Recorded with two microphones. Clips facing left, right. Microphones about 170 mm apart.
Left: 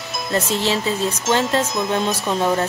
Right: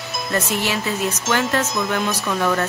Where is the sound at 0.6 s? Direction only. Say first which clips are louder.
Left 2 dB; 25° left (ahead or behind).